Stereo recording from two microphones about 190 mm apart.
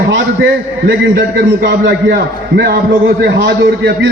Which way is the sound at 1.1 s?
55° right (ahead or behind).